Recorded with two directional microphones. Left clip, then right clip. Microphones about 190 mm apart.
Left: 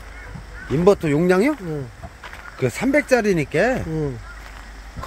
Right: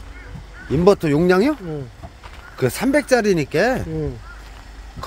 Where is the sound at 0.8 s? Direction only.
15° right (ahead or behind).